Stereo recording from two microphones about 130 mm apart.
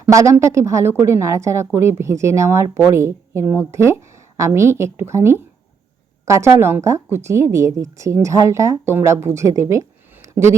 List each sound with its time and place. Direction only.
0.0 s a woman's voice: 25° right (ahead or behind)